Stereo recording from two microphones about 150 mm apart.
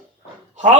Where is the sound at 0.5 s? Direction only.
50° right (ahead or behind).